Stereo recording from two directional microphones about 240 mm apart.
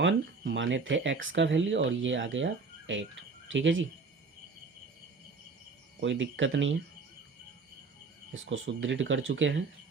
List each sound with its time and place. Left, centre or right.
0.0 s speech: right
6.0 s speech: right
8.3 s speech: right